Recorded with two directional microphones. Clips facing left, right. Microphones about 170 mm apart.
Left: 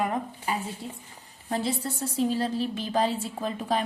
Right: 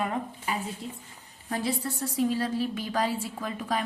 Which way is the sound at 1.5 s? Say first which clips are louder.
Left 1 dB; 25° left (ahead or behind).